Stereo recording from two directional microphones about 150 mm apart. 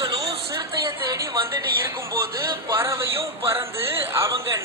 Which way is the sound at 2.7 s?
15° right (ahead or behind).